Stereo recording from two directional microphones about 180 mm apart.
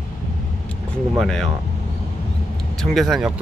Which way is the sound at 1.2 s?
Centre (ahead or behind).